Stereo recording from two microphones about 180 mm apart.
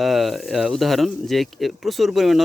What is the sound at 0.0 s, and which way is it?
Speech, centre (ahead or behind).